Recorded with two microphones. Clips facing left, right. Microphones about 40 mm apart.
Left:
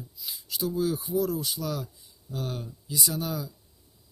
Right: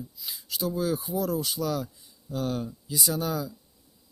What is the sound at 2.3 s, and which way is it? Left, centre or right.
Speech, right.